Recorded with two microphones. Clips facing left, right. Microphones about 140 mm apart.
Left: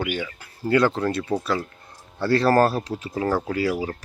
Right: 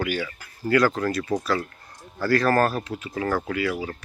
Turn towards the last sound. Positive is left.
turn(degrees=35)  # may be behind; listen again after turning